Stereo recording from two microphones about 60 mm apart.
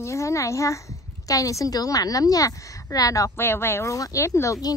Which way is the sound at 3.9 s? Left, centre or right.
Left.